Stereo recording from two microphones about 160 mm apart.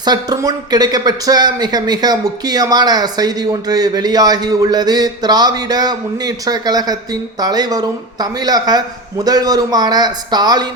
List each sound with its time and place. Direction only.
0.0 s speech: 25° right (ahead or behind)